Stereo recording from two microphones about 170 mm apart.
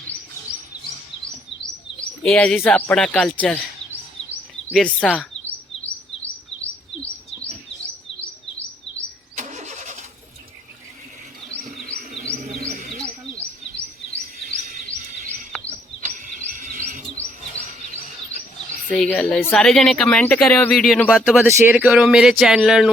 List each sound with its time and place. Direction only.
2.2 s speech: 5° left (ahead or behind)
4.7 s speech: 5° left (ahead or behind)
9.3 s vehicle: 45° right (ahead or behind)
12.6 s wild animals: 50° right (ahead or behind)
14.4 s music: 50° right (ahead or behind)
16.0 s rub: 50° right (ahead or behind)
18.9 s speech: 5° left (ahead or behind)